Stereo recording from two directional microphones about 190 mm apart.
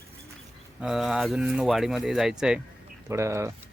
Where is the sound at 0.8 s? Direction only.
Centre (ahead or behind).